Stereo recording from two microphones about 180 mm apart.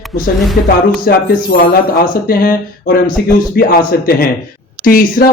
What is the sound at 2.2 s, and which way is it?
Speech, 55° left (ahead or behind).